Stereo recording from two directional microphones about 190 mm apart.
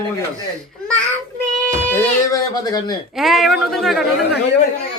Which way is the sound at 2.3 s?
20° left (ahead or behind).